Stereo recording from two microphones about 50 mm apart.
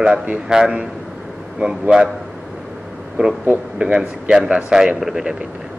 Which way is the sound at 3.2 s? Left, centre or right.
Right.